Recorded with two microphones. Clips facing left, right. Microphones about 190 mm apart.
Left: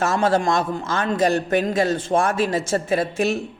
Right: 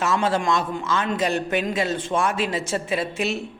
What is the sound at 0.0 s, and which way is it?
A man's voice, 45° left (ahead or behind).